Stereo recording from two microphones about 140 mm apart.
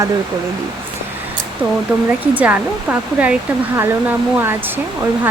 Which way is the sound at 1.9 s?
5° right (ahead or behind).